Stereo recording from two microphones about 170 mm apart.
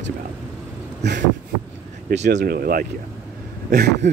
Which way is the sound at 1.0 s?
75° right (ahead or behind).